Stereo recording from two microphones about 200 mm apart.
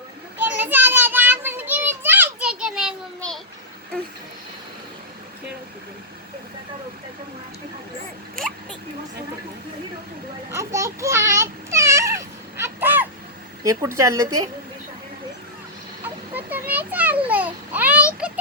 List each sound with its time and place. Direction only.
0.3 s children playing: 10° right (ahead or behind)
8.4 s a sound: 45° right (ahead or behind)
10.5 s a sound: 15° right (ahead or behind)
13.7 s a woman's voice: 15° right (ahead or behind)
16.3 s children playing: 10° right (ahead or behind)
17.2 s babbling: 10° right (ahead or behind)